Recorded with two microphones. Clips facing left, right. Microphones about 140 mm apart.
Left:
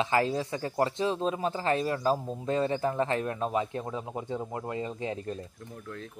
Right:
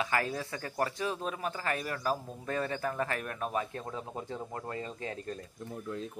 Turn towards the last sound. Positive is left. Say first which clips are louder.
# left 5 dB
turn(degrees=20)  # may be behind; listen again after turning